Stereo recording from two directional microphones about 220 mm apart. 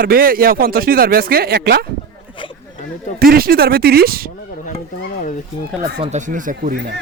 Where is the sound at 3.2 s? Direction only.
40° right (ahead or behind).